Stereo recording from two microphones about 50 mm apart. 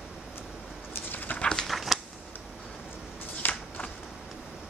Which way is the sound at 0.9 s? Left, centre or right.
Left.